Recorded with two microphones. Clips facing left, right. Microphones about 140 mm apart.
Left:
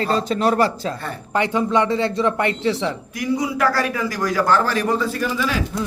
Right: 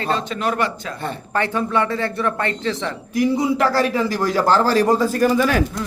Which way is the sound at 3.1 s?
25° right (ahead or behind).